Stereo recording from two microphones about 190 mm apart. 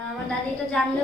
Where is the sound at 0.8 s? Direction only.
5° left (ahead or behind).